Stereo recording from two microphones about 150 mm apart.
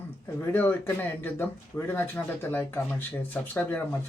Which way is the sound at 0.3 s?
15° left (ahead or behind).